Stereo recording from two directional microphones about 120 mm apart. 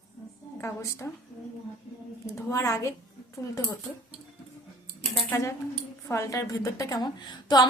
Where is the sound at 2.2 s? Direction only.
25° left (ahead or behind).